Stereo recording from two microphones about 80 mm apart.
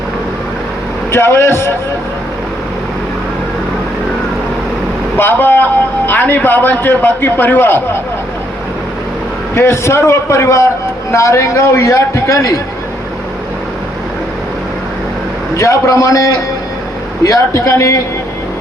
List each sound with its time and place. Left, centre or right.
1.1 s a man's voice: left
5.1 s a man's voice: left
9.6 s a man's voice: left
15.5 s a man's voice: left